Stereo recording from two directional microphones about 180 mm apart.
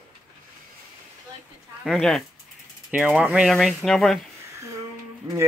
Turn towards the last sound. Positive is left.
turn(degrees=-20)  # may be behind; listen again after turning